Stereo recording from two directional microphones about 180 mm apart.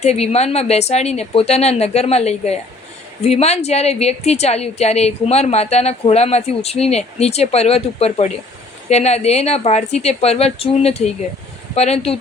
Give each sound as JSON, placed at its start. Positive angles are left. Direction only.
{"t": 0.0, "sound": "a woman's voice", "side_deg": 35}